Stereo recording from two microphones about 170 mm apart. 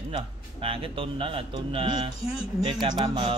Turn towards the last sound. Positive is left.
turn(degrees=-30)  # may be behind; listen again after turning